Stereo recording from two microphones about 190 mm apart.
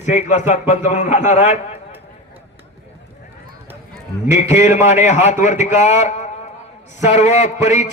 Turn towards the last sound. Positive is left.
turn(degrees=35)  # may be behind; listen again after turning